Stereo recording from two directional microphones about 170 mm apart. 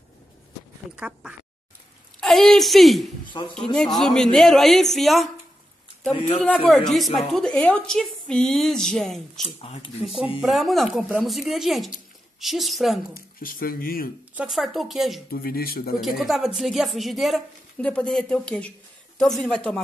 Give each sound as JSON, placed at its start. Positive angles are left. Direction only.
{"t": 0.9, "sound": "a woman's voice", "side_deg": -5}
{"t": 6.3, "sound": "a woman's voice", "side_deg": 5}
{"t": 9.4, "sound": "speech", "side_deg": 40}
{"t": 10.4, "sound": "a woman's voice", "side_deg": 0}
{"t": 13.1, "sound": "speech", "side_deg": 60}
{"t": 14.3, "sound": "a woman's voice", "side_deg": -5}
{"t": 15.3, "sound": "speech", "side_deg": 60}
{"t": 16.0, "sound": "a woman's voice", "side_deg": 0}